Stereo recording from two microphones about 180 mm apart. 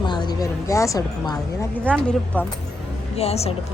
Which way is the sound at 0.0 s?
25° left (ahead or behind).